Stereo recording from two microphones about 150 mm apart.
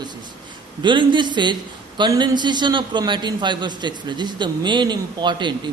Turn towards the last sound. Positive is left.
turn(degrees=-30)  # may be behind; listen again after turning